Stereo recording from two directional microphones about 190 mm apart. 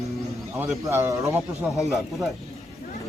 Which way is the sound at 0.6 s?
10° right (ahead or behind).